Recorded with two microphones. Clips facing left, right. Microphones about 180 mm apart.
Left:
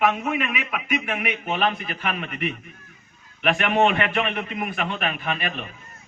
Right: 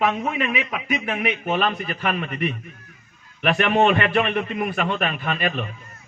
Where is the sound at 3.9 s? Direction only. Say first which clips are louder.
Right 4 dB; 40° right (ahead or behind).